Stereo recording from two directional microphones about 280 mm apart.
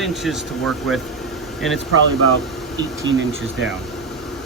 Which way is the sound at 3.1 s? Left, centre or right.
Right.